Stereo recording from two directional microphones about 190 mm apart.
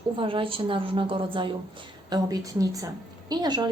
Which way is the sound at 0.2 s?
30° right (ahead or behind).